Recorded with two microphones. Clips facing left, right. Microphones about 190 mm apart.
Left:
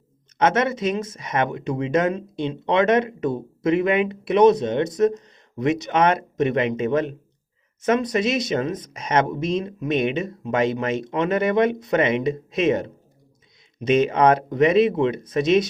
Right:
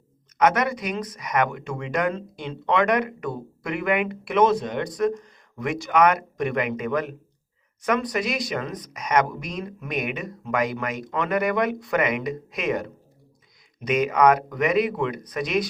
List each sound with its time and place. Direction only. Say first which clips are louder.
0.3 s speech: left 1 dB; 25° left (ahead or behind)